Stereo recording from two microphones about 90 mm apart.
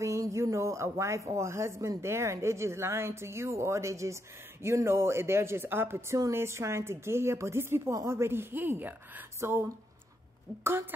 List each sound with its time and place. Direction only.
0.0 s a woman's voice: 35° right (ahead or behind)